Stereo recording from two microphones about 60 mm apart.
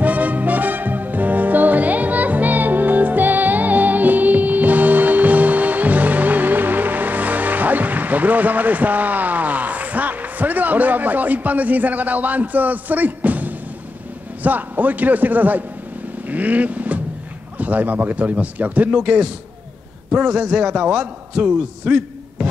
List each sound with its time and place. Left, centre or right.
0.0 s music: right
14.4 s a man's voice: right